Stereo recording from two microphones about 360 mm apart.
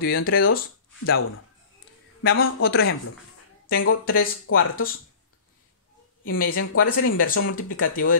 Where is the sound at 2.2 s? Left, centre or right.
Left.